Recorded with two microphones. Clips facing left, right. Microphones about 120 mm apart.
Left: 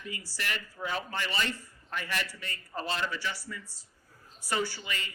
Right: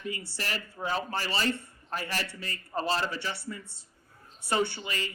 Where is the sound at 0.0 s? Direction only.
30° right (ahead or behind).